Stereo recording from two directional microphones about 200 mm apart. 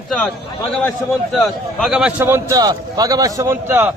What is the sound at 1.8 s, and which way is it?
A man's voice, centre (ahead or behind).